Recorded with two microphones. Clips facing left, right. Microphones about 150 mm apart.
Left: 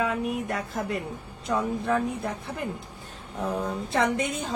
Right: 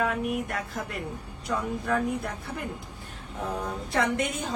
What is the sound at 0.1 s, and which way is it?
Speech, 25° left (ahead or behind).